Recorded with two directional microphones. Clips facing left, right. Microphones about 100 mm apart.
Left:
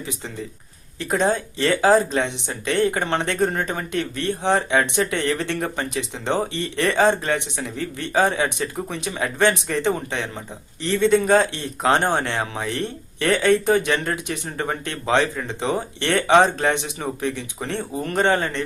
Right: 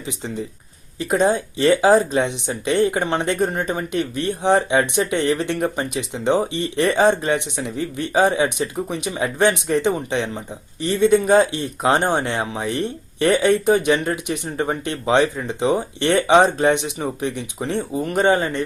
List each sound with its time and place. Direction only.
0.9 s speech: 15° right (ahead or behind)